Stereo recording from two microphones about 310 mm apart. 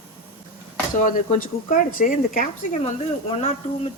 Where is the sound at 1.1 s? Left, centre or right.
Left.